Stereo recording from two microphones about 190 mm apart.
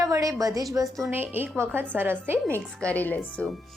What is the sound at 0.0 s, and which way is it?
A woman's voice, 20° right (ahead or behind).